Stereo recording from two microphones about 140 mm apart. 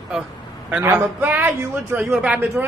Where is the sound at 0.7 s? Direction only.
15° right (ahead or behind).